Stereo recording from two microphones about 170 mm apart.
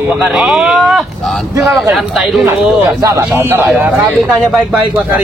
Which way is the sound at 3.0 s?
15° right (ahead or behind).